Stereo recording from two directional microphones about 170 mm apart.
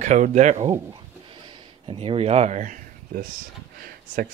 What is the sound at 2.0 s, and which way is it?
Speech, 35° right (ahead or behind).